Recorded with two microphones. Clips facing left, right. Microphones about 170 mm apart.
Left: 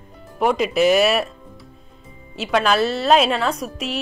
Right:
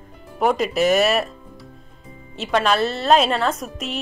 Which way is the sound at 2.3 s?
Centre (ahead or behind).